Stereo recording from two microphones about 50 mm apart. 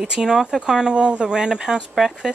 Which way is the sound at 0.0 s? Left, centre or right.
Centre.